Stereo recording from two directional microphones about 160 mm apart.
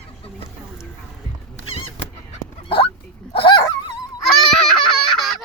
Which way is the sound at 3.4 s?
30° left (ahead or behind).